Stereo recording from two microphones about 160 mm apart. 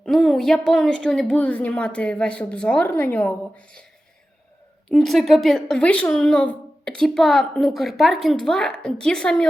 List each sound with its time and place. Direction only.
0.0 s speech: centre (ahead or behind)
4.9 s speech: 5° left (ahead or behind)